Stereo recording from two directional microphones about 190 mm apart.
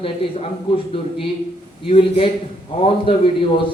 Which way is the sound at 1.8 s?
30° left (ahead or behind).